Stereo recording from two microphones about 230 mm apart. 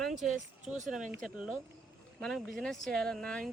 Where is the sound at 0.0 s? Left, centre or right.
Centre.